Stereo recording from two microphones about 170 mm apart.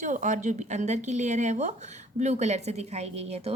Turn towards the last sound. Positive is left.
turn(degrees=-40)  # may be behind; listen again after turning